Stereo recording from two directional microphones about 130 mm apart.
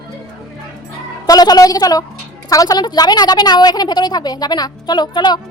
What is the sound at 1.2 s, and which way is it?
A woman's voice, 30° left (ahead or behind).